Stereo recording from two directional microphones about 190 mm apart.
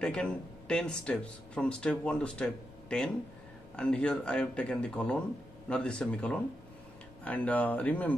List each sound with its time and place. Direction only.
0.0 s speech: 5° left (ahead or behind)